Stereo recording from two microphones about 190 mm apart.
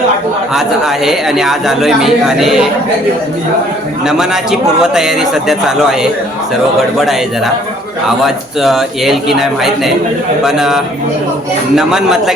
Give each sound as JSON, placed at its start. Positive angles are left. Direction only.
{"t": 0.5, "sound": "a man's voice", "side_deg": 0}
{"t": 4.0, "sound": "a man's voice", "side_deg": -5}